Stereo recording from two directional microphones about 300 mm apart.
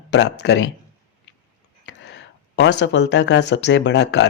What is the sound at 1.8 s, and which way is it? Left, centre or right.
Speech, left.